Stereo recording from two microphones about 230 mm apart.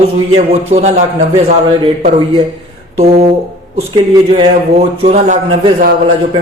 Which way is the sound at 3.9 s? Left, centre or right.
Right.